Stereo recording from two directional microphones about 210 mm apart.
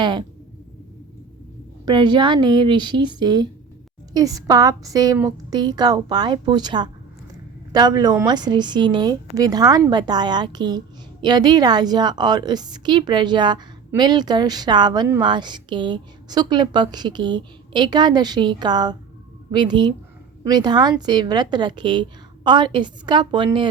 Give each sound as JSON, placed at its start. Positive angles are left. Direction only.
{"t": 0.0, "sound": "a woman's voice", "side_deg": -20}
{"t": 1.8, "sound": "a woman's voice", "side_deg": -20}